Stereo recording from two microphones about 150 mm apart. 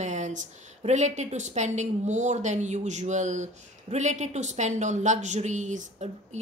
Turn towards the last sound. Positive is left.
turn(degrees=-50)  # may be behind; listen again after turning